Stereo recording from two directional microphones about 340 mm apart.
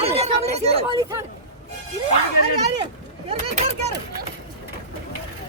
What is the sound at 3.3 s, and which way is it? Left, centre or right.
Speech, centre.